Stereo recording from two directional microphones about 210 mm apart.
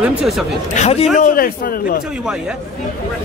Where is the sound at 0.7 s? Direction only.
30° left (ahead or behind).